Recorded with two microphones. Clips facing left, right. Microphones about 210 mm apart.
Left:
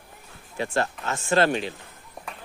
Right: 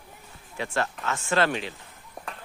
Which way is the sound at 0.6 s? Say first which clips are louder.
Left 3 dB; 35° left (ahead or behind).